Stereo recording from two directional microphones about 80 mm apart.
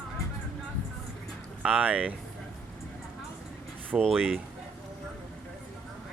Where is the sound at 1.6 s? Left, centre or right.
Centre.